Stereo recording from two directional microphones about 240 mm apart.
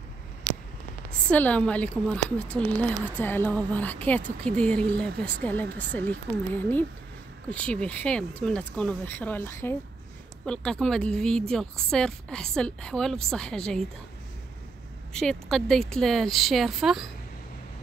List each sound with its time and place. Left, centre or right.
1.3 s speech: centre
5.7 s speech: right
6.5 s speech: centre
15.1 s speech: centre